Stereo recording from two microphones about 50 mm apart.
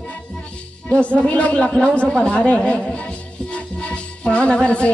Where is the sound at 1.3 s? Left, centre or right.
Left.